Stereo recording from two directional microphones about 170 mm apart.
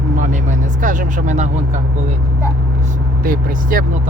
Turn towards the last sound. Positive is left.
turn(degrees=-55)  # may be behind; listen again after turning